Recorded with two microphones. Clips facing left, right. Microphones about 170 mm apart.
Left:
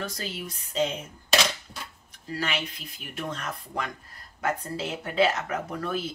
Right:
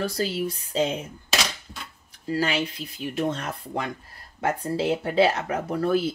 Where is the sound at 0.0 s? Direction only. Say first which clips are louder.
Right 8 dB; 35° right (ahead or behind).